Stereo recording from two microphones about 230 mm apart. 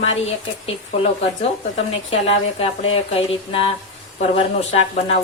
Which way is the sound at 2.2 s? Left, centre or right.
Left.